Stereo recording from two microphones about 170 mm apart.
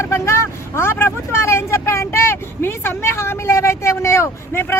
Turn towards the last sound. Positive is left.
turn(degrees=15)  # may be behind; listen again after turning